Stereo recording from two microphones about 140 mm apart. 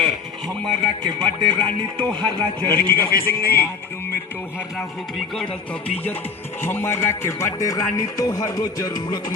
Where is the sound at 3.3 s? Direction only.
15° left (ahead or behind).